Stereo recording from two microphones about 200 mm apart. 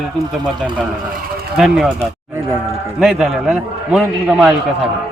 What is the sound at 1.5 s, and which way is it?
Speech, centre (ahead or behind).